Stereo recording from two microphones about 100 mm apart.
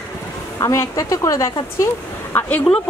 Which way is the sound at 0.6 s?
35° left (ahead or behind).